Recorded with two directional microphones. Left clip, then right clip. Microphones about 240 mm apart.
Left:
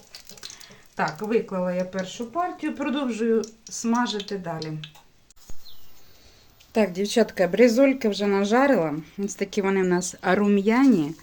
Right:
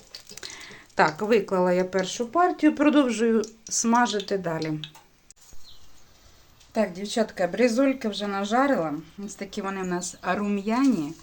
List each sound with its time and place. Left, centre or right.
0.9 s speech: right
6.7 s a woman's voice: left